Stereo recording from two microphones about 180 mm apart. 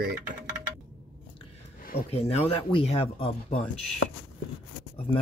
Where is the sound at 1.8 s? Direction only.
55° left (ahead or behind).